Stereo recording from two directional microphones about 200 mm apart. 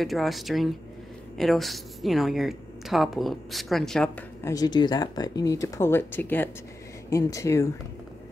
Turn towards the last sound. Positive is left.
turn(degrees=15)  # may be behind; listen again after turning